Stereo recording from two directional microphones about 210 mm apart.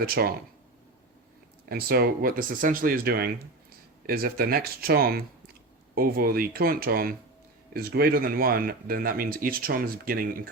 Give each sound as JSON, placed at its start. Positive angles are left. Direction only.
{"t": 0.0, "sound": "speech", "side_deg": -45}
{"t": 1.7, "sound": "speech", "side_deg": -45}